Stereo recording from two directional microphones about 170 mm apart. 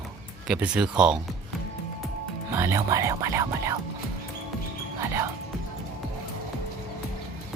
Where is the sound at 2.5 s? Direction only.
15° right (ahead or behind).